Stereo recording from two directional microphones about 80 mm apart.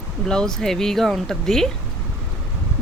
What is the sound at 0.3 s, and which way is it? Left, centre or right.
Speech, centre.